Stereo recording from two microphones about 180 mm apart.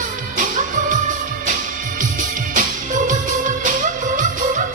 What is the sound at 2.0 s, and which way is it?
Music, 45° right (ahead or behind).